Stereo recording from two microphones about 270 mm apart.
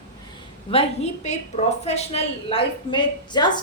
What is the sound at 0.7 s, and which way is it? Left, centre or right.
A woman's voice, left.